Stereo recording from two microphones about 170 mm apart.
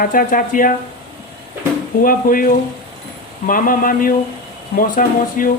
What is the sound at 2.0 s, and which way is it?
Speech, 55° left (ahead or behind).